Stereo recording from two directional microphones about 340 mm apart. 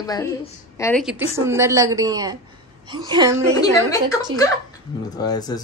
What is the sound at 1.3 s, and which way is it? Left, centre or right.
A woman's voice, centre.